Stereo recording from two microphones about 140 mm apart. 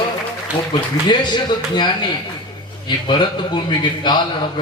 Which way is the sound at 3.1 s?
35° left (ahead or behind).